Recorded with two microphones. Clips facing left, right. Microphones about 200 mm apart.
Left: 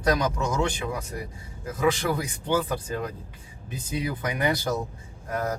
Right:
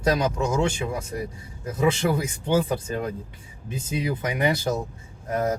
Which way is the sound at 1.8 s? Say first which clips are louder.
Right 2 dB; 25° right (ahead or behind).